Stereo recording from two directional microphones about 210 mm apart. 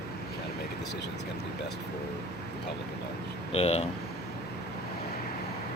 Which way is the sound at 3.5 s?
30° left (ahead or behind).